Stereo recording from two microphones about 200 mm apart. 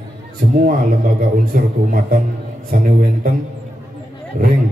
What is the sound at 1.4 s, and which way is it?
A man's voice, 45° right (ahead or behind).